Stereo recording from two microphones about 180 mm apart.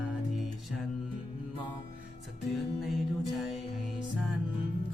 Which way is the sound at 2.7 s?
Centre (ahead or behind).